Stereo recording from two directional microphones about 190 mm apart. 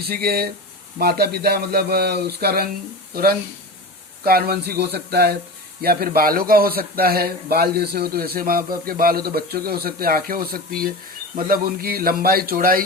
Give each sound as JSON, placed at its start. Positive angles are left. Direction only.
{"t": 0.1, "sound": "speech", "side_deg": -55}
{"t": 4.2, "sound": "a man's voice", "side_deg": -55}